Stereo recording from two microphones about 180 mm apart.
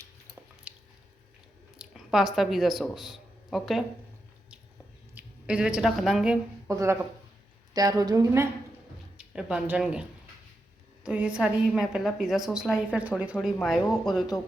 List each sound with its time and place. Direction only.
0.7 s squish: 5° right (ahead or behind)
1.8 s speech: centre (ahead or behind)
5.1 s speech: 5° right (ahead or behind)
6.7 s a woman's voice: 15° right (ahead or behind)
9.1 s a woman's voice: 5° right (ahead or behind)